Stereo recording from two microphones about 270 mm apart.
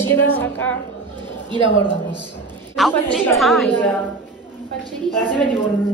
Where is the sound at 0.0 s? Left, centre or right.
Centre.